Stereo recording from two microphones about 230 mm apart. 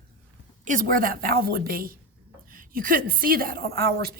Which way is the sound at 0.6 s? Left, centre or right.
Right.